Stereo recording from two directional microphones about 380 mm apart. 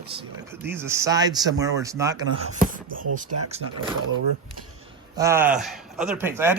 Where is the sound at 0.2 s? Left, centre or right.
Centre.